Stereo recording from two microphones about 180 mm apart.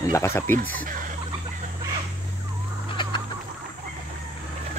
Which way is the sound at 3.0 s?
30° left (ahead or behind).